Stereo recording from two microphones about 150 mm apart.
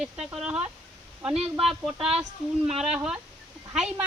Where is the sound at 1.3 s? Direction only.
40° right (ahead or behind).